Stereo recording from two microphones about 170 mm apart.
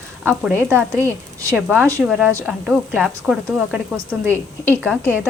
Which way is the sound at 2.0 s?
5° right (ahead or behind).